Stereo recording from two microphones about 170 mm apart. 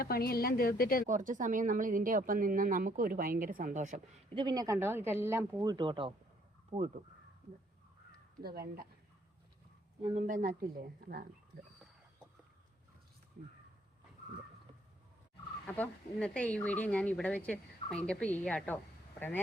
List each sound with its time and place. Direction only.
0.0 s a woman's voice: 65° left (ahead or behind)
1.0 s speech: 50° right (ahead or behind)
4.4 s speech: 25° right (ahead or behind)
5.5 s speech: 25° right (ahead or behind)
6.7 s speech: 40° right (ahead or behind)
8.4 s speech: 65° right (ahead or behind)
10.0 s speech: 45° right (ahead or behind)
15.6 s speech: 10° left (ahead or behind)